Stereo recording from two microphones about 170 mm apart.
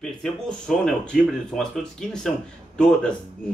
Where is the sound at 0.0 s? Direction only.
5° left (ahead or behind).